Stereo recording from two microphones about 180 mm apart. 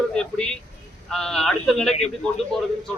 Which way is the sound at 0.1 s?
5° left (ahead or behind).